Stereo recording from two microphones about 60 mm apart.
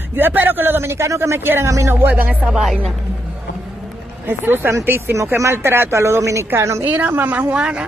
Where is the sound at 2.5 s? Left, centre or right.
Centre.